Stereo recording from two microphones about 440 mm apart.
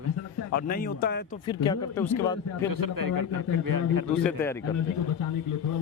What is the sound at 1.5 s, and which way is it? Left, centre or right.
Speech, centre.